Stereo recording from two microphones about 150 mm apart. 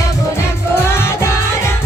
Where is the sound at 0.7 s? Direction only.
15° left (ahead or behind).